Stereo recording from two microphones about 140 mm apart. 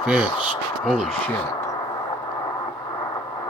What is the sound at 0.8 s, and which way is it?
Speech, centre (ahead or behind).